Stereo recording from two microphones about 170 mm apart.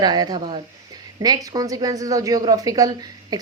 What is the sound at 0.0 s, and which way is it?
A woman's voice, 25° right (ahead or behind).